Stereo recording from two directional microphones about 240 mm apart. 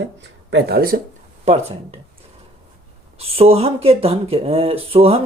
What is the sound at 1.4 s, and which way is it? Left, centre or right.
Speech, right.